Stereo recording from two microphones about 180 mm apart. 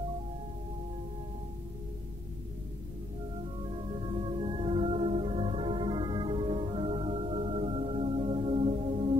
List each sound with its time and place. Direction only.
3.7 s music: 30° right (ahead or behind)